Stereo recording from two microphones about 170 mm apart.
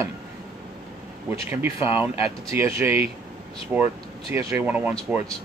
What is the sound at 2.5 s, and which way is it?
Speech, 15° right (ahead or behind).